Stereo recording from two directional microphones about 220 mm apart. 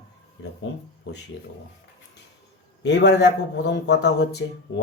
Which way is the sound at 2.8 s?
55° left (ahead or behind).